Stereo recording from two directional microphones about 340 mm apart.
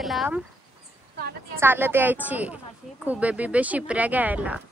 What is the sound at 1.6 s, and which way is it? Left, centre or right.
Speech, centre.